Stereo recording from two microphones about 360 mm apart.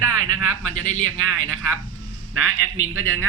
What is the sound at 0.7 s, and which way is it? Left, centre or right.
Speech, right.